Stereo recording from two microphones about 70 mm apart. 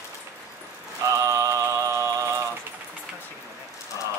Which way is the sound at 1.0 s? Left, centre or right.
Right.